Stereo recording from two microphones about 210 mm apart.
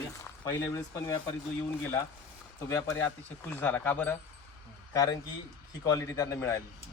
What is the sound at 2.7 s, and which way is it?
Speech, 10° left (ahead or behind).